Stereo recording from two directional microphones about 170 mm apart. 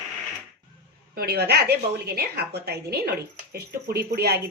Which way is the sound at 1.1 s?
65° right (ahead or behind).